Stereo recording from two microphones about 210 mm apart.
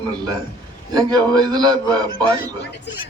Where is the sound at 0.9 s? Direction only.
20° right (ahead or behind).